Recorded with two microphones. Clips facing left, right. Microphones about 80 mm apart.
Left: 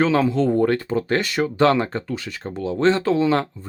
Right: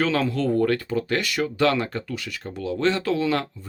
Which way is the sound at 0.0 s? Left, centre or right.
Left.